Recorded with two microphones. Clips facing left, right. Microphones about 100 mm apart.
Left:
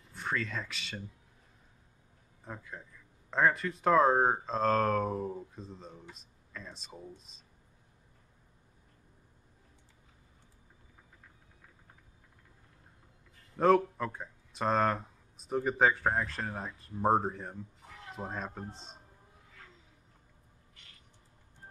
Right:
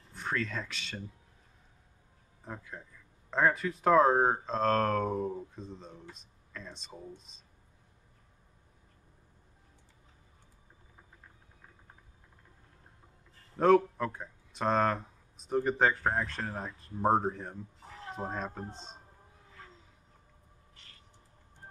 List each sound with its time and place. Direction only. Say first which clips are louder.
0.1 s speech: right 1 dB; centre (ahead or behind)
2.4 s speech: right 1 dB; centre (ahead or behind)
13.6 s speech: right 1 dB; centre (ahead or behind)
17.8 s music: right 4 dB; 30° right (ahead or behind)
18.1 s speech: right 2 dB; centre (ahead or behind)